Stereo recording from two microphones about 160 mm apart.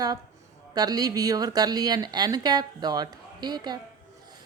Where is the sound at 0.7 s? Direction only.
25° right (ahead or behind).